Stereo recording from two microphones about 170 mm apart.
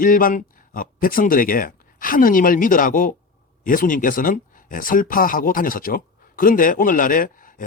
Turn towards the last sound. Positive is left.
turn(degrees=55)  # may be behind; listen again after turning